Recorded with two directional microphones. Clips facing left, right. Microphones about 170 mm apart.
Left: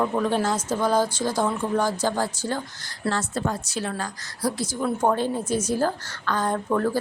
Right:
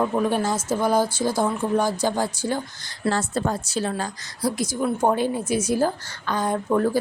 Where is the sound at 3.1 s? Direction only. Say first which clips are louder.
Right 2 dB; 35° right (ahead or behind).